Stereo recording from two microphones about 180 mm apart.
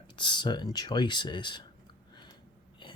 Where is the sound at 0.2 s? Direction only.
25° left (ahead or behind).